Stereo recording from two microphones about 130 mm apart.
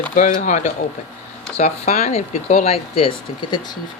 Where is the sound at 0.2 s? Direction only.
75° left (ahead or behind).